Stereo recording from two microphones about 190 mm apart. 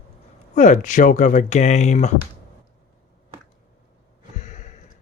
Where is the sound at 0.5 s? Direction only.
40° left (ahead or behind).